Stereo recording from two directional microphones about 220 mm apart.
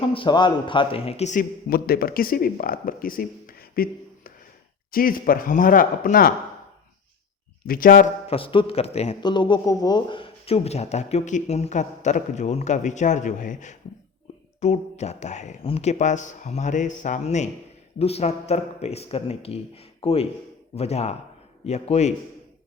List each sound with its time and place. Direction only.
0.0 s a man's voice: 25° left (ahead or behind); by 6.3 s 40° left (ahead or behind)
7.7 s a man's voice: 40° left (ahead or behind)